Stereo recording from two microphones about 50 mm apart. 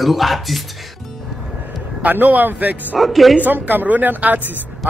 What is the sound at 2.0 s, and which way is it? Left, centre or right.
Speech, right.